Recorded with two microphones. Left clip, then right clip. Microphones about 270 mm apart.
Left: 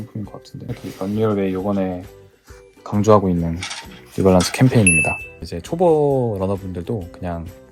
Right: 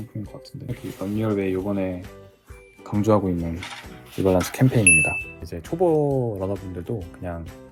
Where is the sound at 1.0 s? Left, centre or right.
Centre.